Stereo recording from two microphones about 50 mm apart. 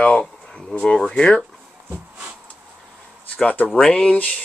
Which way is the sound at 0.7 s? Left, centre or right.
Centre.